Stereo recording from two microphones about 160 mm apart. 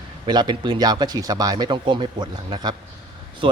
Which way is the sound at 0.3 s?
25° right (ahead or behind).